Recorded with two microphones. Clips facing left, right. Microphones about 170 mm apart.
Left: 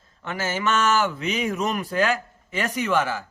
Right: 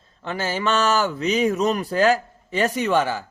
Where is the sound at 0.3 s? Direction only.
35° right (ahead or behind).